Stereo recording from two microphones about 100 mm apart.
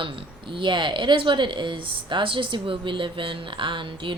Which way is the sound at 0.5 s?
55° right (ahead or behind).